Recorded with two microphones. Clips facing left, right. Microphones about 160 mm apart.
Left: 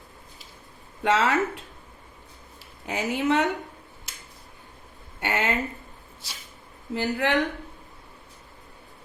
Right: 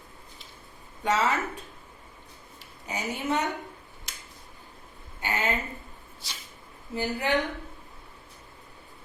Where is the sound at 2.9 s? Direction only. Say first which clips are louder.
Left 5 dB; 90° left.